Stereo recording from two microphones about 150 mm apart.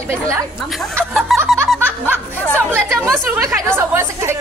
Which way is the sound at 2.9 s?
Centre (ahead or behind).